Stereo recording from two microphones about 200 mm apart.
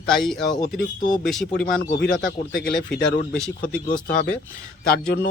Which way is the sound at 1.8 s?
60° left (ahead or behind).